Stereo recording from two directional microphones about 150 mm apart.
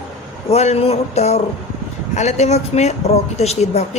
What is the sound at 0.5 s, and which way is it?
Speech, 45° left (ahead or behind).